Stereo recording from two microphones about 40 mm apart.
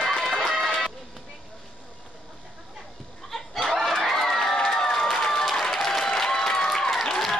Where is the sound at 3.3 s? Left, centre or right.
Centre.